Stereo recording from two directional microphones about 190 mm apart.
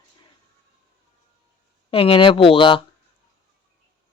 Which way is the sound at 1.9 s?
30° left (ahead or behind).